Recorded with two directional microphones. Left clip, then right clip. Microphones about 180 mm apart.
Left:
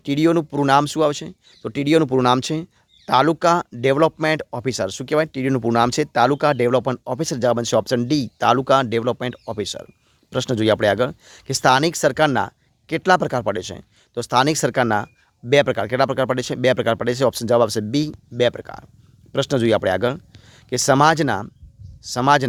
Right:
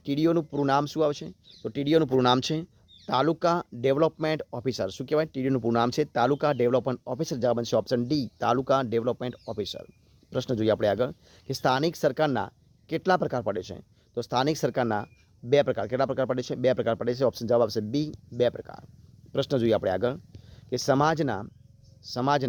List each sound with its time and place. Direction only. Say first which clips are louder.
0.0 s speech: left 7 dB; 30° left (ahead or behind)